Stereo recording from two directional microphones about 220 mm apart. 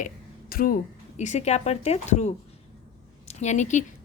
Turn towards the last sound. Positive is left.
turn(degrees=35)  # may be behind; listen again after turning